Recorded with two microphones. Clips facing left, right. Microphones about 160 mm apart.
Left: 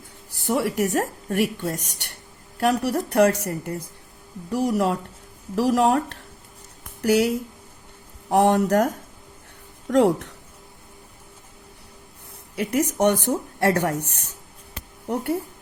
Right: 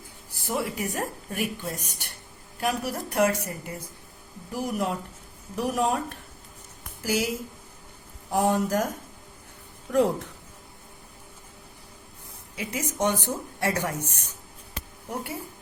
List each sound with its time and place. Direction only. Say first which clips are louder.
0.4 s a woman's voice: left 7 dB; 75° left (ahead or behind)
4.5 s speech: left 7 dB; 80° left
7.0 s a woman's voice: left 8 dB; 65° left (ahead or behind)
9.9 s a woman's voice: left 5 dB; 75° left (ahead or behind)
12.5 s speech: left 8 dB; 65° left (ahead or behind)
15.1 s speech: left 9 dB; 65° left (ahead or behind)